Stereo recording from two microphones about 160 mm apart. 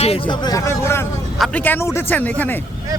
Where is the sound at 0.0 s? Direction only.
35° left (ahead or behind).